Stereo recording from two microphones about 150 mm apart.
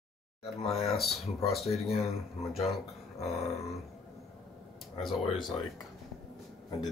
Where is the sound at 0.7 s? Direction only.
Centre (ahead or behind).